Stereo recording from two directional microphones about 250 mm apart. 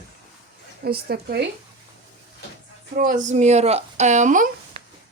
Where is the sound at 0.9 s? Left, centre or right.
Right.